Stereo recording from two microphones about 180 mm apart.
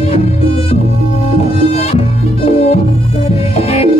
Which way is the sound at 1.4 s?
35° left (ahead or behind).